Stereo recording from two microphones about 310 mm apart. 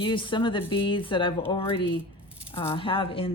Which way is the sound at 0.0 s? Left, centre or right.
Centre.